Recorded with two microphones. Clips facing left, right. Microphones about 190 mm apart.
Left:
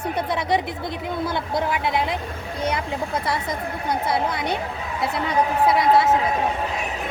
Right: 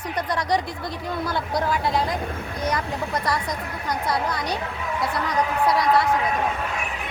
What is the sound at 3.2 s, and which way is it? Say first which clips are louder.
Speech: left 1 dB; 25° left (ahead or behind).